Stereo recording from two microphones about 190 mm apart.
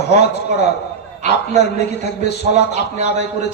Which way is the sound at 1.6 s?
60° left (ahead or behind).